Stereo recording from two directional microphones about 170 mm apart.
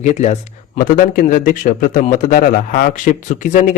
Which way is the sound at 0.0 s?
45° left (ahead or behind).